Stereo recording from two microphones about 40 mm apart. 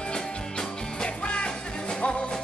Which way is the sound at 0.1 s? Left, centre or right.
Left.